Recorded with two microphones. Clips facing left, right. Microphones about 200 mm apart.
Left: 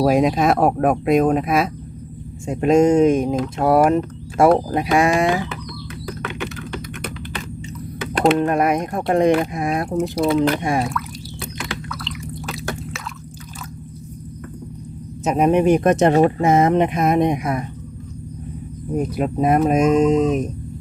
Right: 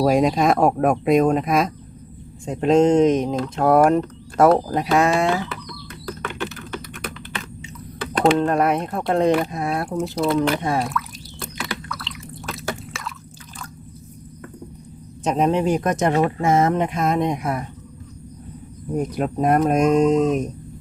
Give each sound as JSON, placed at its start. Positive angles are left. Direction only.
{"t": 0.0, "sound": "speech", "side_deg": 0}
{"t": 6.7, "sound": "typing", "side_deg": 0}
{"t": 8.4, "sound": "speech", "side_deg": 10}
{"t": 11.9, "sound": "drip", "side_deg": 0}
{"t": 15.2, "sound": "speech", "side_deg": 10}
{"t": 16.4, "sound": "speech", "side_deg": 20}
{"t": 18.9, "sound": "speech", "side_deg": 5}